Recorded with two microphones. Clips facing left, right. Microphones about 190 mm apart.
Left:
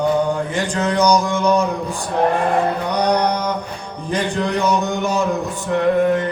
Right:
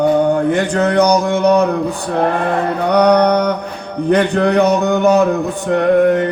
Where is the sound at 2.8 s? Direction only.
60° right (ahead or behind).